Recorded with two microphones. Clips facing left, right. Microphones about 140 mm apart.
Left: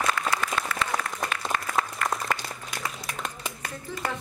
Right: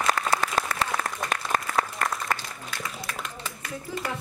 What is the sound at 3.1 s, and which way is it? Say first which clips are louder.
Clapping: even; 15° left (ahead or behind).